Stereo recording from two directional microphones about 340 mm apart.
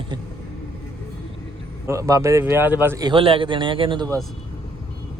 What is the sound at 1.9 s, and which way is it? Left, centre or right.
A man's voice, centre.